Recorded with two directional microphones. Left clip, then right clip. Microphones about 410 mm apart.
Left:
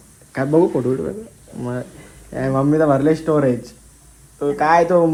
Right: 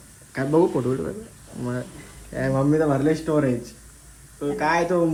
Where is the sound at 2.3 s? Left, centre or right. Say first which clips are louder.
Left 4 dB; left.